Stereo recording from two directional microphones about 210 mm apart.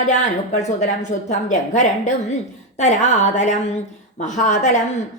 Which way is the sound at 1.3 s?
35° left (ahead or behind).